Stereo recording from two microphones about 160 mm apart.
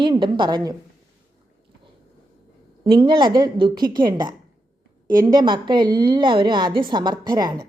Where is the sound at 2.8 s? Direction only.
30° right (ahead or behind).